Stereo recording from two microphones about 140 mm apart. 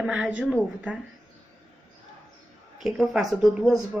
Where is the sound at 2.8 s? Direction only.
5° right (ahead or behind).